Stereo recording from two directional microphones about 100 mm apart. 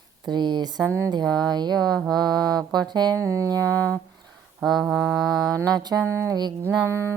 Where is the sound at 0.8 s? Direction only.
25° right (ahead or behind).